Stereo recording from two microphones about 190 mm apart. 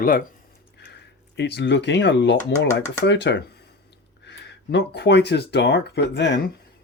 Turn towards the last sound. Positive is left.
turn(degrees=65)  # may be behind; listen again after turning